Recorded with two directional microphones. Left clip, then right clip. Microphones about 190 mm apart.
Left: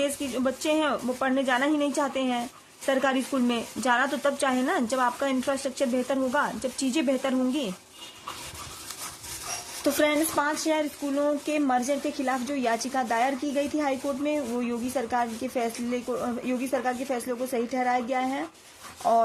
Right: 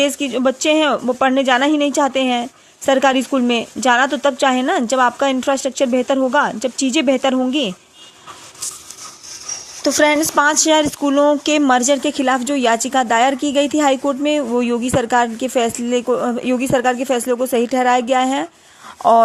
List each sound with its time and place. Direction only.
0.0 s speech: 35° right (ahead or behind)
9.8 s speech: 25° right (ahead or behind)